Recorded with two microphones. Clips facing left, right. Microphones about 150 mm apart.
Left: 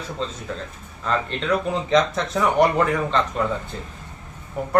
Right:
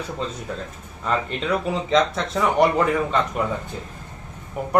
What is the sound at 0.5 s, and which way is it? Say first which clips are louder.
A man's voice: even; 10° right (ahead or behind).